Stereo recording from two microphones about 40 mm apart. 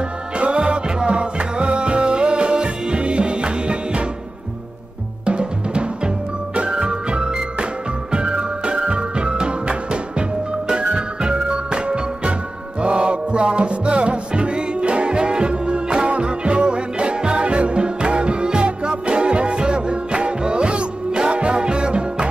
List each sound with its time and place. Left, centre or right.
0.4 s music: right
5.2 s music: right